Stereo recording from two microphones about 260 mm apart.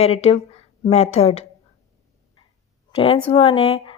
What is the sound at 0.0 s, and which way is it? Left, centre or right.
A woman's voice, left.